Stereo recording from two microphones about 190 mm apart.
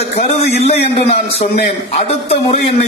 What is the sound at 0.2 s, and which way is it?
Speech, 35° left (ahead or behind).